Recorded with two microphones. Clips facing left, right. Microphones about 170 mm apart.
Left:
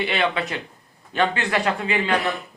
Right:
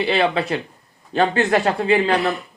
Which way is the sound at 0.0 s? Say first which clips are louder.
Right 4 dB; 30° right (ahead or behind).